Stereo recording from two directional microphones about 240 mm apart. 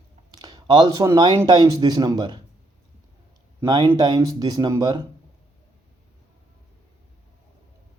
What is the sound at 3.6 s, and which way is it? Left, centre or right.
Speech, centre.